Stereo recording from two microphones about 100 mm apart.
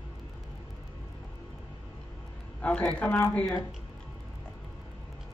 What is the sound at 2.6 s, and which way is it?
A man's voice, 15° left (ahead or behind).